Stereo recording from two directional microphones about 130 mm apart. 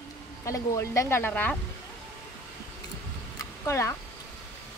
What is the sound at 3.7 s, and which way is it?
Speech, 20° left (ahead or behind).